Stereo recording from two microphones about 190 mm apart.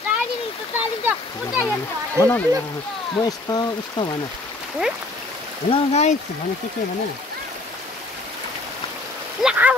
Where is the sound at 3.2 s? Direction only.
20° left (ahead or behind).